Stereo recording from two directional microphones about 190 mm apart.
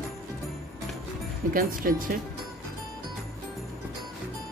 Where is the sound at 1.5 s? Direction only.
50° right (ahead or behind).